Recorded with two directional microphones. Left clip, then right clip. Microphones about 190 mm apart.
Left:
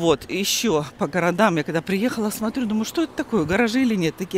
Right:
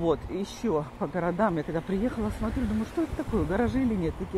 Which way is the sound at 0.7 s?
40° left (ahead or behind).